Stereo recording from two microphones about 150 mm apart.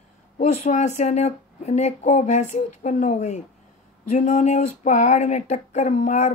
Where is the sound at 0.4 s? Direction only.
50° left (ahead or behind).